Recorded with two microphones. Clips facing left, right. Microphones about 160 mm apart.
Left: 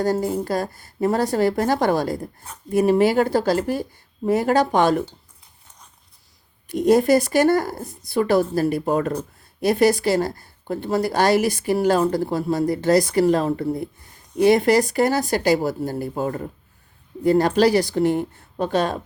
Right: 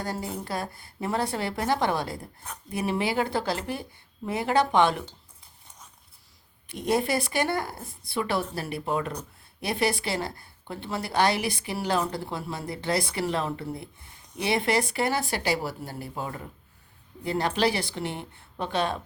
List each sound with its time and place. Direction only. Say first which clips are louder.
0.0 s a woman's voice: left 11 dB; 45° left (ahead or behind)
6.7 s a woman's voice: left 10 dB; 45° left (ahead or behind)